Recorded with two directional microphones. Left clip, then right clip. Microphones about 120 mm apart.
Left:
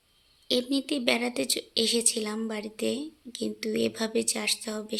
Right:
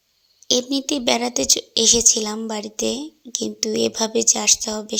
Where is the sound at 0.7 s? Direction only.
45° right (ahead or behind).